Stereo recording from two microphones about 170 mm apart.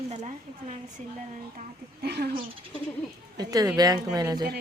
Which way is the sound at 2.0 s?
70° right (ahead or behind).